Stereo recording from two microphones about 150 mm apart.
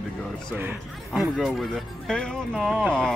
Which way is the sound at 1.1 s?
Centre (ahead or behind).